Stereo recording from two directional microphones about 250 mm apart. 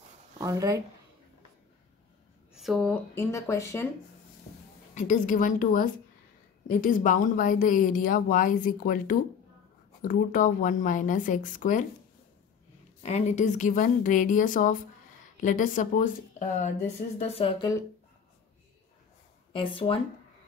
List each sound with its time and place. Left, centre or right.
0.4 s speech: centre
2.5 s speech: centre
4.9 s speech: left
13.0 s a woman's voice: left
19.5 s a woman's voice: left